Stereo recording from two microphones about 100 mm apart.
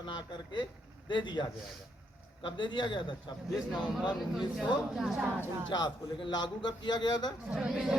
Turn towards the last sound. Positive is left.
turn(degrees=-5)  # may be behind; listen again after turning